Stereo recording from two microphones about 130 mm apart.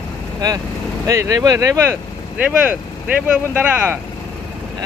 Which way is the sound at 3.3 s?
10° right (ahead or behind).